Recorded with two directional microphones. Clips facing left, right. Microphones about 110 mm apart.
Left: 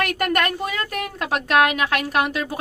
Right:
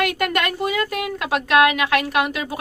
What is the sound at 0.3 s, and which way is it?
Speech, 45° left (ahead or behind).